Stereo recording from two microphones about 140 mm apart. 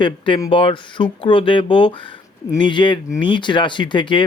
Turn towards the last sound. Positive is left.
turn(degrees=35)  # may be behind; listen again after turning